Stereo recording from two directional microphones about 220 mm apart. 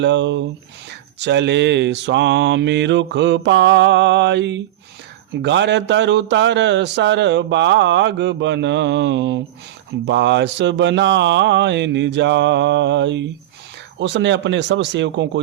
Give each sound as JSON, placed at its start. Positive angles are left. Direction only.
{"t": 0.0, "sound": "speech", "side_deg": -55}